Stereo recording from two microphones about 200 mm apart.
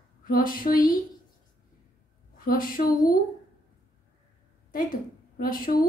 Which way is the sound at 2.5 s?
45° left (ahead or behind).